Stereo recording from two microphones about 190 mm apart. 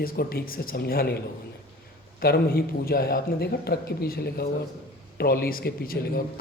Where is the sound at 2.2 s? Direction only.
55° left (ahead or behind).